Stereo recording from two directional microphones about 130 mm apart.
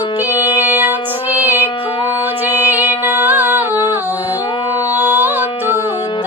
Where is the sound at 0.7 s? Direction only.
15° right (ahead or behind).